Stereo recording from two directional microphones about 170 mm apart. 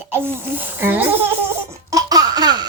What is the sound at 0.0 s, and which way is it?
Speech, 15° right (ahead or behind).